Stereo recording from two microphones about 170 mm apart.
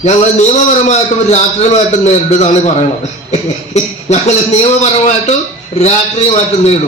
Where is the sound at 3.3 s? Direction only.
40° left (ahead or behind).